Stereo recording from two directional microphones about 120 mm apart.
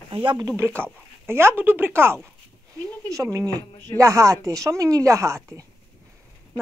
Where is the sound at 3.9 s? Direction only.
25° right (ahead or behind).